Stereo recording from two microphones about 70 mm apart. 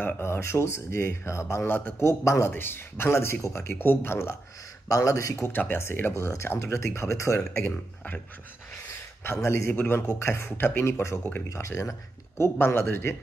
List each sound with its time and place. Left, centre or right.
0.0 s speech: left
2.5 s speech: left
4.8 s speech: left
5.4 s speech: left
9.2 s speech: left
12.5 s speech: left